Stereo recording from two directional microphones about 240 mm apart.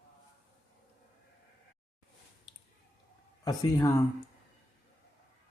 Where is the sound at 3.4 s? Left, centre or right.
Centre.